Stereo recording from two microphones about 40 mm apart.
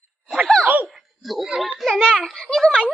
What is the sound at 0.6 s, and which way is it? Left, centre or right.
Laughter, right.